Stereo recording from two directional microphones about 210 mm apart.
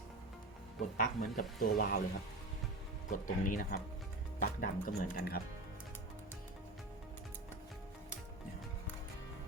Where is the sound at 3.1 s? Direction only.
40° left (ahead or behind).